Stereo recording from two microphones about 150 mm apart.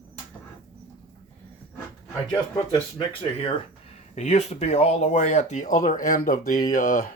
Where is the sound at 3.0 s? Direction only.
35° left (ahead or behind).